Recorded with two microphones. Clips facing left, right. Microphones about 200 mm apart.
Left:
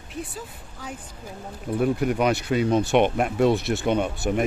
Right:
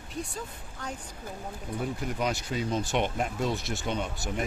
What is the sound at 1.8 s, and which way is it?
Speech, 65° left (ahead or behind).